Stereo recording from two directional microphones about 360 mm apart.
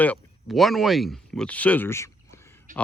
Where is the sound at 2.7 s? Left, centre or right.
Right.